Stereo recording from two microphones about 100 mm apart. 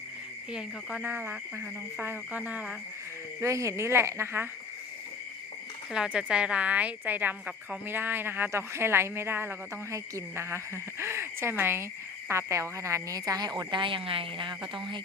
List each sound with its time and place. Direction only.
0.5 s speech: 5° right (ahead or behind)
1.0 s a woman's voice: 20° right (ahead or behind)
3.4 s a woman's voice: 30° right (ahead or behind)
5.9 s a woman's voice: 10° right (ahead or behind); by 13.5 s 40° right (ahead or behind)
13.6 s speech: 50° right (ahead or behind)